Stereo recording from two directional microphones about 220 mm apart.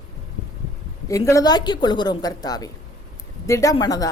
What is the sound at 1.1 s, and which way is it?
A woman's voice, 15° left (ahead or behind).